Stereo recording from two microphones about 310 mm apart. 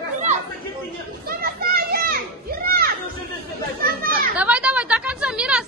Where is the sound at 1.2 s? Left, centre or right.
Right.